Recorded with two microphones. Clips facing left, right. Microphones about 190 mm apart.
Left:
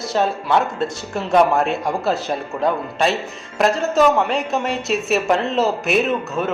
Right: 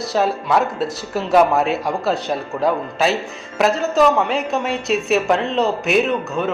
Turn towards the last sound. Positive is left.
turn(degrees=0)  # may be behind; listen again after turning